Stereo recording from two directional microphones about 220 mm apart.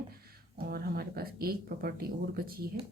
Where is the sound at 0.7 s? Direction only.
45° right (ahead or behind).